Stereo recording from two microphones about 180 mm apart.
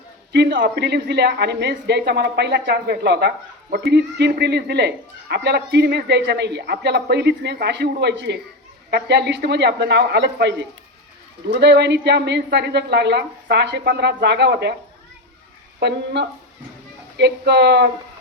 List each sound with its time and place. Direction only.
0.3 s a woman's voice: 60° right (ahead or behind)
15.8 s a woman's voice: 70° right (ahead or behind)